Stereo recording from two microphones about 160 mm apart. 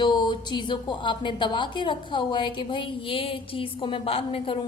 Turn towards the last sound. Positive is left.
turn(degrees=35)  # may be behind; listen again after turning